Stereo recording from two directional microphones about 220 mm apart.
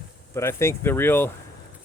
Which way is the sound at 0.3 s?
10° left (ahead or behind).